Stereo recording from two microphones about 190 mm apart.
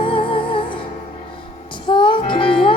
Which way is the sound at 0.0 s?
25° left (ahead or behind).